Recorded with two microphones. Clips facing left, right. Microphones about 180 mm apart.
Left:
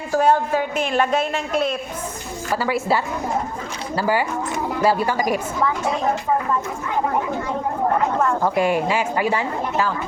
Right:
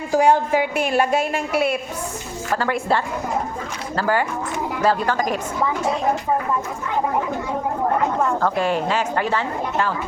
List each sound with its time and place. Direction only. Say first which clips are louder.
0.1 s a man's voice: right 1 dB; 15° right (ahead or behind)
2.6 s a woman's voice: left 1 dB; 5° left (ahead or behind)
8.4 s a woman's voice: left 1 dB; 15° left (ahead or behind)